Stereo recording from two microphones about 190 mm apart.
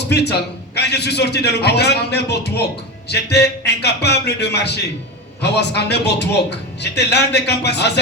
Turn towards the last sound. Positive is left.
turn(degrees=60)  # may be behind; listen again after turning